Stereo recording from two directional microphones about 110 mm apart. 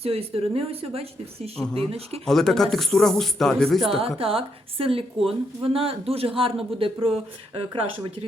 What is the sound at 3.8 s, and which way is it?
A woman's voice, 55° right (ahead or behind).